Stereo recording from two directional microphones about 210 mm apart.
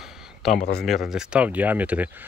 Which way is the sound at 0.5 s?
50° left (ahead or behind).